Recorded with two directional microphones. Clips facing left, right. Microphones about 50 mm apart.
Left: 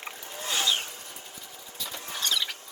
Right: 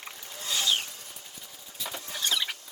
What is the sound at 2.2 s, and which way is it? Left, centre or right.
Rodents, centre.